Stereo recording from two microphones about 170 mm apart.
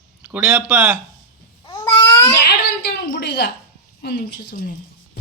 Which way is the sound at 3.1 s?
75° left (ahead or behind).